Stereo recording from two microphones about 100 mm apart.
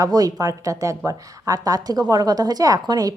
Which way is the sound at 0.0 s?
40° right (ahead or behind).